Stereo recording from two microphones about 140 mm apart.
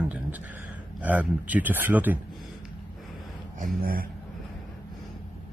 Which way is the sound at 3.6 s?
90° right.